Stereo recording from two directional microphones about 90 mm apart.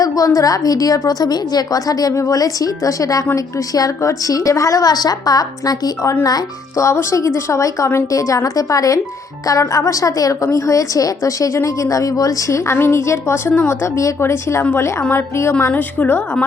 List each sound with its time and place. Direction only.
0.0 s a woman's voice: 40° left (ahead or behind)
14.6 s a woman's voice: 20° left (ahead or behind)
15.6 s a woman's voice: 20° left (ahead or behind)